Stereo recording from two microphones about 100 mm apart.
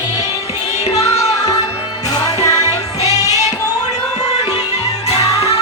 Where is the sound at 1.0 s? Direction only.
90° left.